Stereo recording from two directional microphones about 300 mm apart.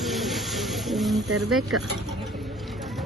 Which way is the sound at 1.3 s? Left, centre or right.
Right.